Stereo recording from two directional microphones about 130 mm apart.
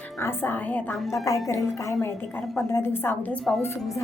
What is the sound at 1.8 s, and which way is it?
A woman's voice, 25° left (ahead or behind).